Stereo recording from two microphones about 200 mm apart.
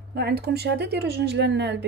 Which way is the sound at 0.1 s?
55° right (ahead or behind).